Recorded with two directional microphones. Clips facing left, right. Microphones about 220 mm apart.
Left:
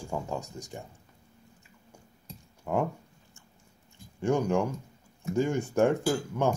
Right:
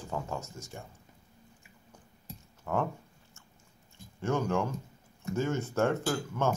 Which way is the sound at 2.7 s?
15° left (ahead or behind).